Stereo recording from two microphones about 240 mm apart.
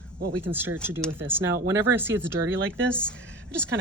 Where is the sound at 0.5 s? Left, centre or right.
Centre.